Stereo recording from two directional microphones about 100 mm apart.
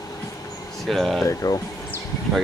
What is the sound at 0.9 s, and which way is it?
Speech, centre (ahead or behind).